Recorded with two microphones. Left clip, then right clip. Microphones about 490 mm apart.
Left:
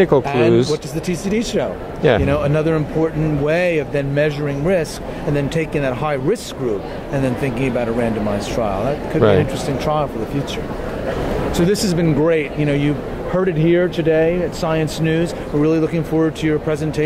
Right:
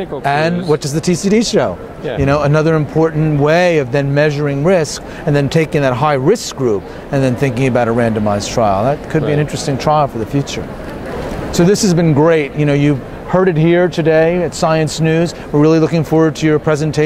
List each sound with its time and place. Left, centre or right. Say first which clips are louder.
0.2 s speech: even; right
11.5 s speech: right 8 dB; right